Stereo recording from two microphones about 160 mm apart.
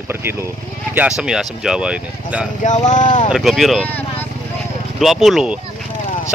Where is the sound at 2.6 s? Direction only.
50° left (ahead or behind).